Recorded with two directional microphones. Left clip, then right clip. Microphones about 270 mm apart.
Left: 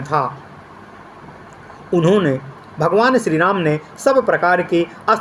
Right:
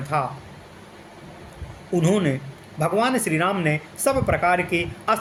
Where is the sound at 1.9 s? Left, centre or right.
Centre.